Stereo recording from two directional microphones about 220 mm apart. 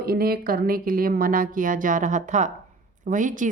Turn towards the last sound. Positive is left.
turn(degrees=-35)  # may be behind; listen again after turning